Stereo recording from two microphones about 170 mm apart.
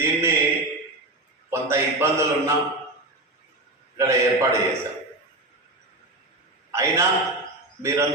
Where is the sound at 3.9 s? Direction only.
20° right (ahead or behind).